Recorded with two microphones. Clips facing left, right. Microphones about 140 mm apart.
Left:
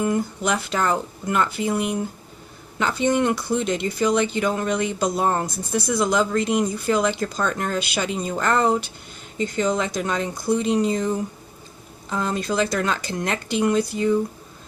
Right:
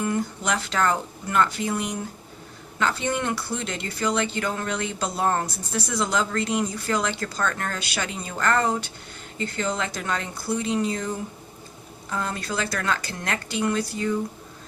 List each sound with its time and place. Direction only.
0.0 s speech: 15° left (ahead or behind)
12.1 s speech: 20° left (ahead or behind)